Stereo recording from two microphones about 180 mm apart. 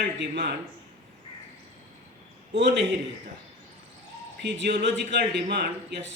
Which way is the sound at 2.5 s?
75° right (ahead or behind).